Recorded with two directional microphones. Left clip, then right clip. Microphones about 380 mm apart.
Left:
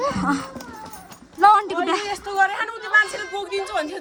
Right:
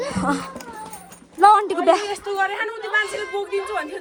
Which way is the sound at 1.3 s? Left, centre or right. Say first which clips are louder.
Right 1 dB; centre.